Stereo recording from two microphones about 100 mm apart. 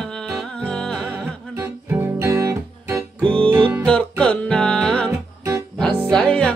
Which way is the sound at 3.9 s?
10° left (ahead or behind).